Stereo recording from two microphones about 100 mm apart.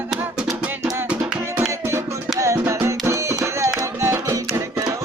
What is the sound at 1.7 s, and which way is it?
Music, 30° right (ahead or behind).